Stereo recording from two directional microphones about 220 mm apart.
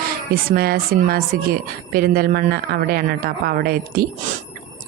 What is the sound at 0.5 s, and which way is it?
A woman's voice, 45° right (ahead or behind).